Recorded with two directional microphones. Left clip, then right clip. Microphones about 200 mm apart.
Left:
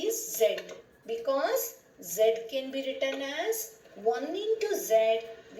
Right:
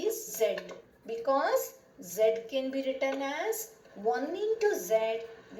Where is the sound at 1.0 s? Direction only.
35° right (ahead or behind).